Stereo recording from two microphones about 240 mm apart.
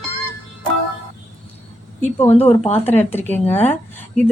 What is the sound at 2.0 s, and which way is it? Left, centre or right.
Speech, left.